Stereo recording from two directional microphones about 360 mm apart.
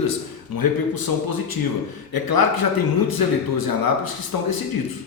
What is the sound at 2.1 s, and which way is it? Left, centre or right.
Speech, left.